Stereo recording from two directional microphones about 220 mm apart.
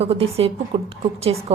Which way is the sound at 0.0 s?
25° right (ahead or behind).